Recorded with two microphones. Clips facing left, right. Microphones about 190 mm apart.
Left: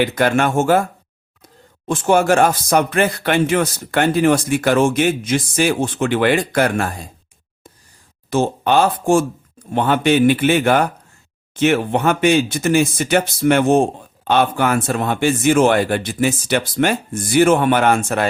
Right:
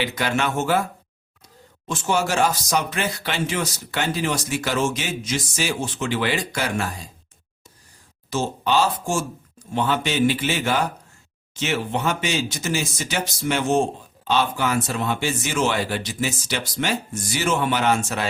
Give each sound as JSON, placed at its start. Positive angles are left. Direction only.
{"t": 0.0, "sound": "speech", "side_deg": 50}
{"t": 1.9, "sound": "speech", "side_deg": 55}
{"t": 8.3, "sound": "speech", "side_deg": 55}